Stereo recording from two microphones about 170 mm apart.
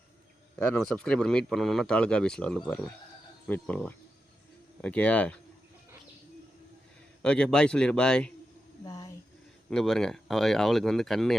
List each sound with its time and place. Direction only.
0.6 s speech: 5° left (ahead or behind)
7.2 s speech: 5° left (ahead or behind)
8.8 s a sound: 20° left (ahead or behind)
9.6 s speech: centre (ahead or behind)